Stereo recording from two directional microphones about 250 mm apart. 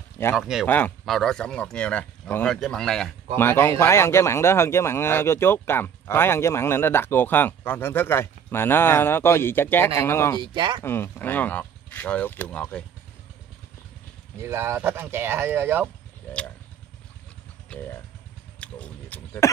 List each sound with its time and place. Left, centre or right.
0.4 s speech: centre
10.4 s speech: centre
10.8 s speech: centre
14.4 s speech: centre
17.6 s vehicle: centre
18.6 s a sound: centre